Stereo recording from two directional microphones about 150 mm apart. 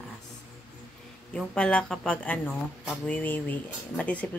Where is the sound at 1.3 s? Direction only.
5° left (ahead or behind).